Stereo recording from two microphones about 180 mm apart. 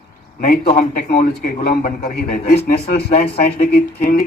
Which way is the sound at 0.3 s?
55° left (ahead or behind).